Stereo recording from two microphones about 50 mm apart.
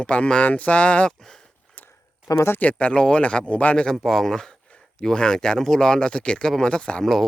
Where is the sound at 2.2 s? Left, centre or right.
Left.